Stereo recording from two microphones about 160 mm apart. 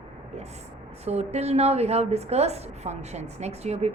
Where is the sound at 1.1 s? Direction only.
40° right (ahead or behind).